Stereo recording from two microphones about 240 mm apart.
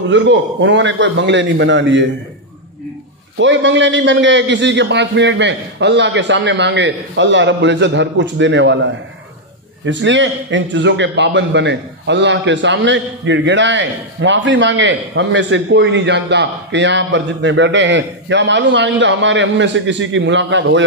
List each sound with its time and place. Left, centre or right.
0.1 s a man's voice: right
3.3 s a man's voice: right